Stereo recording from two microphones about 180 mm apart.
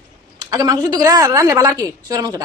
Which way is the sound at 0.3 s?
20° right (ahead or behind).